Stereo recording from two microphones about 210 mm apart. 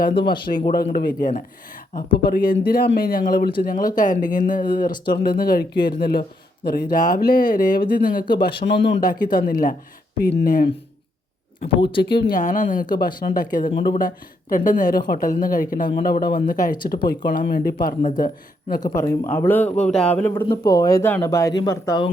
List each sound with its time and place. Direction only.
0.0 s speech: 55° left (ahead or behind)
0.3 s speech: 20° left (ahead or behind)
0.9 s speech: 40° left (ahead or behind)
8.4 s speech: 55° left (ahead or behind)
11.6 s speech: 25° left (ahead or behind)
12.3 s speech: 35° left (ahead or behind)
18.8 s a man's voice: 15° left (ahead or behind)
20.4 s a man's voice: 20° left (ahead or behind)